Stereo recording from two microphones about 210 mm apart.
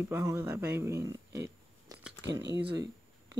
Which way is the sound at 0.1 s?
15° right (ahead or behind).